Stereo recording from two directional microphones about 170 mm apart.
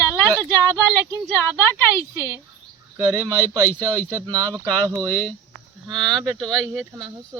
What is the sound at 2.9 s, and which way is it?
Speech, 15° right (ahead or behind).